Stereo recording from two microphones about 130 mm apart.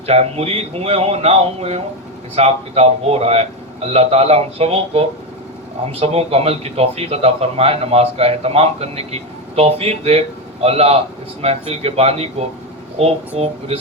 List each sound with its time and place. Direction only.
0.0 s a man's voice: 50° right (ahead or behind)